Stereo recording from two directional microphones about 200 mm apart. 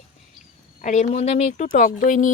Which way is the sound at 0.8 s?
35° left (ahead or behind).